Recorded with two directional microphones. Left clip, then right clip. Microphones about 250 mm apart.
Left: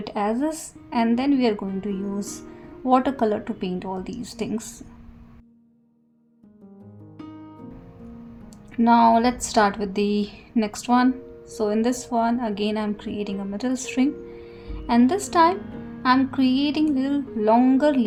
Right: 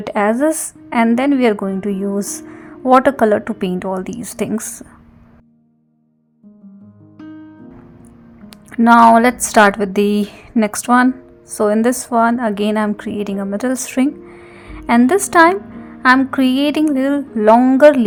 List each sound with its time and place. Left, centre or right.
0.1 s a woman's voice: right
8.4 s a woman's voice: right